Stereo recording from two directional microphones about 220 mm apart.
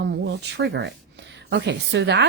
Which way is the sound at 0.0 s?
50° right (ahead or behind).